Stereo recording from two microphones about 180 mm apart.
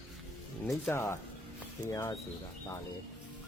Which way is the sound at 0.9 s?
15° left (ahead or behind).